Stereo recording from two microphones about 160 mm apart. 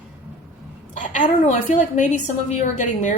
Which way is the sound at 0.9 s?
50° left (ahead or behind).